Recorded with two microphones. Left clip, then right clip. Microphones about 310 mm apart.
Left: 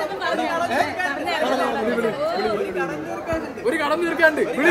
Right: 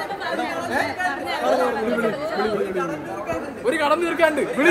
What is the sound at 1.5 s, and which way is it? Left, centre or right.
Speech, centre.